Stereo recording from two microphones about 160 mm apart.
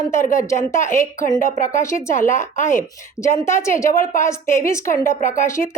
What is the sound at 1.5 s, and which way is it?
Speech, 50° left (ahead or behind).